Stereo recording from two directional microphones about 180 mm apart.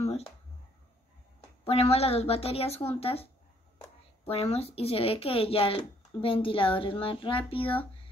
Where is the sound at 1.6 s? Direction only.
35° left (ahead or behind).